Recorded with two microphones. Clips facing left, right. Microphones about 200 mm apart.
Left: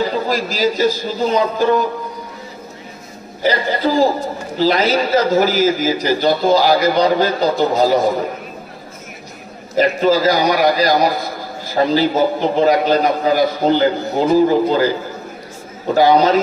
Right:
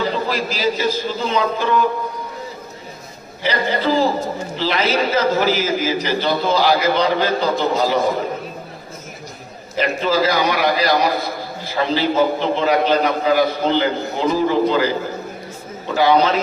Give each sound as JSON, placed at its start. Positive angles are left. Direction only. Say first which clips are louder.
{"t": 0.3, "sound": "a man's voice", "louder": "left 3 dB", "side_deg": 40}
{"t": 3.4, "sound": "a man's voice", "louder": "left 2 dB", "side_deg": 40}
{"t": 9.8, "sound": "a man's voice", "louder": "left 4 dB", "side_deg": 40}
{"t": 15.9, "sound": "a man's voice", "louder": "left 3 dB", "side_deg": 40}